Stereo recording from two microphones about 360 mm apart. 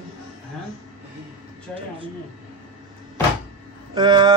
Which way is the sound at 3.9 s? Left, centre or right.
Centre.